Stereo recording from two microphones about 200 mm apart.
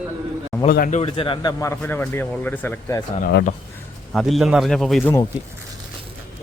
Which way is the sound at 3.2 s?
50° left (ahead or behind).